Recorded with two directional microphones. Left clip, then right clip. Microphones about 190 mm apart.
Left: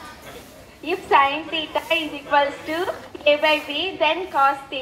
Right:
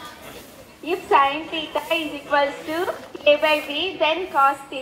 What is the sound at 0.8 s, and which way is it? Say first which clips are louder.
A woman's voice: even; 25° left (ahead or behind).